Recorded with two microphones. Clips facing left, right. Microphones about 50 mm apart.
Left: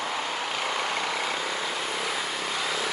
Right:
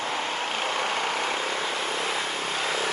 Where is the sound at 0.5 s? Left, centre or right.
Right.